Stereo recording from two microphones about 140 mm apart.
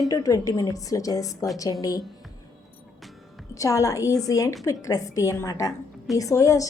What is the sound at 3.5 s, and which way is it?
A woman's voice, 25° left (ahead or behind).